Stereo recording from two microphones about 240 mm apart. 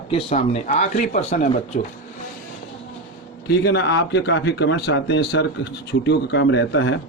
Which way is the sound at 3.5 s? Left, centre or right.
Left.